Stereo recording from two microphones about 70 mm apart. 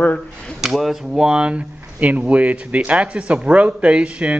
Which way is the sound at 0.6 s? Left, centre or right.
Centre.